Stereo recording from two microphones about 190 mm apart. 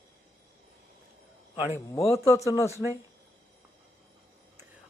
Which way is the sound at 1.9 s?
15° left (ahead or behind).